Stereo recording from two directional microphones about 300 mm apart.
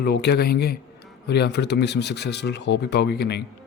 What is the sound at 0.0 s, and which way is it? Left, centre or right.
Speech, left.